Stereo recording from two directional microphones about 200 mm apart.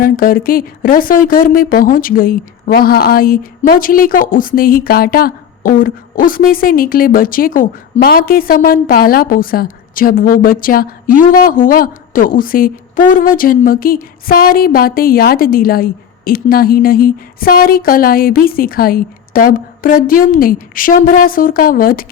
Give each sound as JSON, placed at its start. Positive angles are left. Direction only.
{"t": 0.0, "sound": "speech", "side_deg": 45}